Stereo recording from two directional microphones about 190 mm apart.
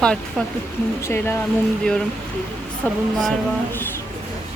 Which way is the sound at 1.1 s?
10° left (ahead or behind).